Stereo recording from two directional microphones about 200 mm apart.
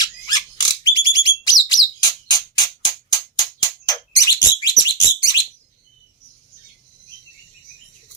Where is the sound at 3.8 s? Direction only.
20° left (ahead or behind).